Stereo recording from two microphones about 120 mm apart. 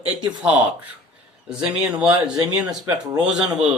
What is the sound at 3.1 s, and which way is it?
Speech, 5° right (ahead or behind).